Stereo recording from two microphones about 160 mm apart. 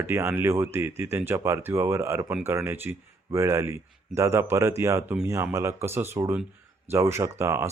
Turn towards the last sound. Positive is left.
turn(degrees=-15)  # may be behind; listen again after turning